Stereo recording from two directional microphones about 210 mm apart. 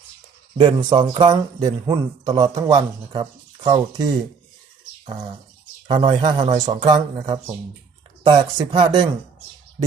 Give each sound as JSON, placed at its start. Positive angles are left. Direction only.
{"t": 0.5, "sound": "a man's voice", "side_deg": -20}
{"t": 5.9, "sound": "a man's voice", "side_deg": -20}